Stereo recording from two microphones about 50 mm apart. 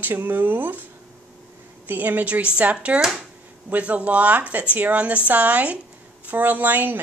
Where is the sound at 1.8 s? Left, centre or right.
Right.